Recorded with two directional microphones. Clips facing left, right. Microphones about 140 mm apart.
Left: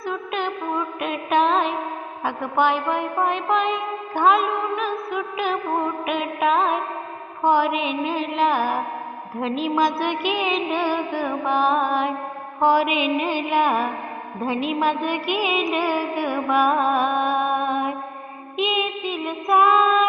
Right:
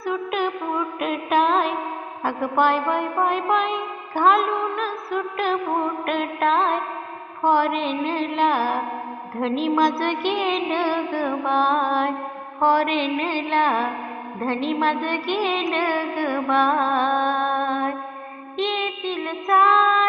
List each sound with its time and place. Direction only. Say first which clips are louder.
0.0 s music: right 2 dB; 5° right (ahead or behind)
12.5 s mantra: even; 5° left (ahead or behind)
14.3 s music: even; 5° left (ahead or behind)